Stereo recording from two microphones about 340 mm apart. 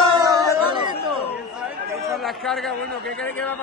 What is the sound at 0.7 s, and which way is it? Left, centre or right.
Chatter, centre.